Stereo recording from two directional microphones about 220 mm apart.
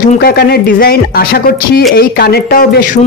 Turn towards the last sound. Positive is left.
turn(degrees=40)  # may be behind; listen again after turning